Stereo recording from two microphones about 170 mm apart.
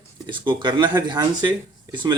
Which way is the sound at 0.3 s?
30° right (ahead or behind).